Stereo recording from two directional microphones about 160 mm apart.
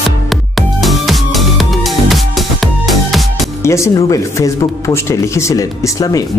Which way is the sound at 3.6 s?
15° left (ahead or behind).